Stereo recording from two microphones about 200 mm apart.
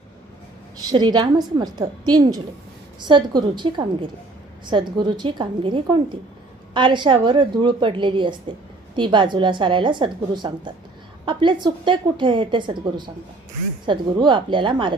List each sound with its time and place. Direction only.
0.9 s a woman's voice: 20° right (ahead or behind)